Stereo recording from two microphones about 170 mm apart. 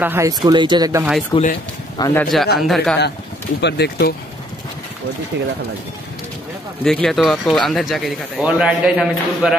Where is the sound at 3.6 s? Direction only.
75° left (ahead or behind).